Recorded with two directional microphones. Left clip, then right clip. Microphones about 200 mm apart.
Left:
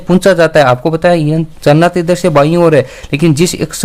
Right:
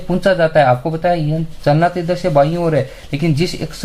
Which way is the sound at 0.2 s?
45° left (ahead or behind).